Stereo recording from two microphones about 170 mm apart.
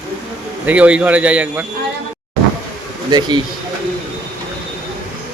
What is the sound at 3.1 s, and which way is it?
Speech, 25° right (ahead or behind).